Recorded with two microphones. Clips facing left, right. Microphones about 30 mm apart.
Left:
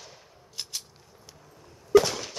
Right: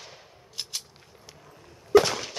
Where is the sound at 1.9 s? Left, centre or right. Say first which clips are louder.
Right 1 dB; right.